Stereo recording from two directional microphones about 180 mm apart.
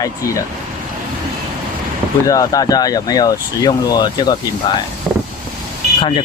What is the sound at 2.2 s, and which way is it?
Speech, 20° left (ahead or behind).